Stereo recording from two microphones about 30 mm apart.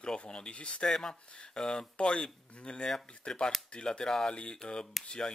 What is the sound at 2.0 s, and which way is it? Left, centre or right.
Speech, left.